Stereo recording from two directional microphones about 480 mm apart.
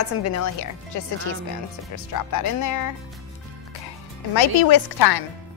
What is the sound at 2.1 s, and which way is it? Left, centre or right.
Speech, left.